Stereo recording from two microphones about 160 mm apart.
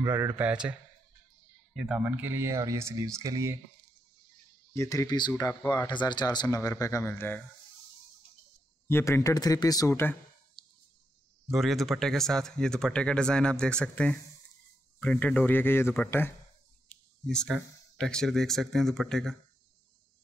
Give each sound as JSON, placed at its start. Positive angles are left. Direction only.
{"t": 0.0, "sound": "speech", "side_deg": -15}
{"t": 4.7, "sound": "speech", "side_deg": 20}
{"t": 8.8, "sound": "speech", "side_deg": 15}
{"t": 11.5, "sound": "speech", "side_deg": 0}
{"t": 16.9, "sound": "cricket", "side_deg": 5}
{"t": 17.9, "sound": "speech", "side_deg": 5}